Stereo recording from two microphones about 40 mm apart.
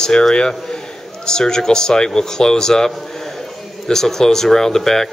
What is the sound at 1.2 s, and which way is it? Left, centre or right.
Speech, centre.